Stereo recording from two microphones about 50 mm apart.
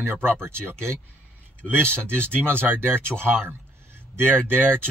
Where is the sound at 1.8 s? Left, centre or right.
Right.